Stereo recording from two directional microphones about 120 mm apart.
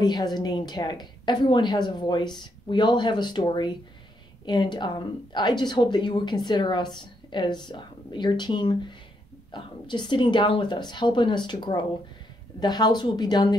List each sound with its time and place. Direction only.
0.0 s speech: 35° left (ahead or behind)